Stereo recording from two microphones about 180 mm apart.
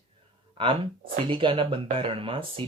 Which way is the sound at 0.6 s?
25° right (ahead or behind).